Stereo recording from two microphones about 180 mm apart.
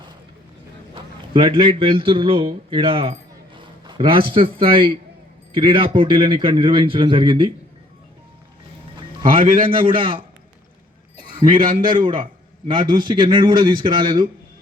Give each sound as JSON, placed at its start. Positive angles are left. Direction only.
{"t": 0.9, "sound": "a man's voice", "side_deg": -30}
{"t": 9.3, "sound": "a man's voice", "side_deg": -30}
{"t": 11.3, "sound": "a man's voice", "side_deg": -25}